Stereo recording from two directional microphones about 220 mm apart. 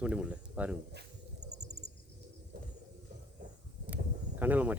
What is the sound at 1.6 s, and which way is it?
Cricket, 30° right (ahead or behind).